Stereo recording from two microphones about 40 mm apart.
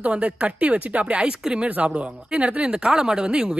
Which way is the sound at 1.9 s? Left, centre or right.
Right.